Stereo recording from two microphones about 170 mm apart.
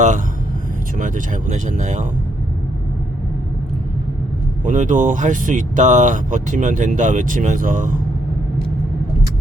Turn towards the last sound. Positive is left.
turn(degrees=-50)  # may be behind; listen again after turning